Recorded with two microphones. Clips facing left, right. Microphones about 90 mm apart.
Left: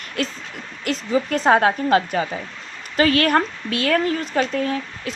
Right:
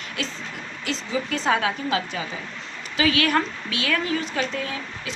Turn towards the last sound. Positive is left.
turn(degrees=45)  # may be behind; listen again after turning